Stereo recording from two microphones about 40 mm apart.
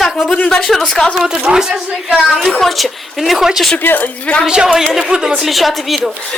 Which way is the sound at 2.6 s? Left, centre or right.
Centre.